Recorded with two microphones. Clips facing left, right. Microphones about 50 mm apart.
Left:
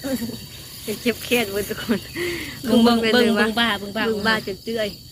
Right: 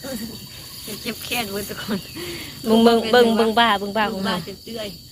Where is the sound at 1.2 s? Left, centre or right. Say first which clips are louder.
Left 4 dB; left.